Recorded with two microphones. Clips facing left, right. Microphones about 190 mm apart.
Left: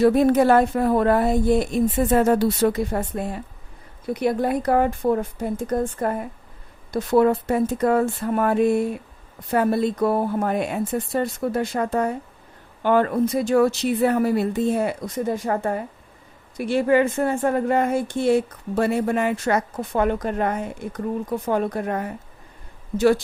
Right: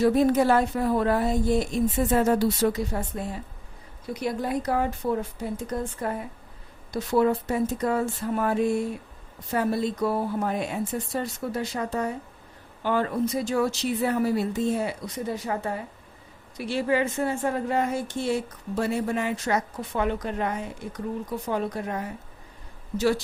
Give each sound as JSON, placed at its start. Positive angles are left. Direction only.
{"t": 0.0, "sound": "a woman's voice", "side_deg": 60}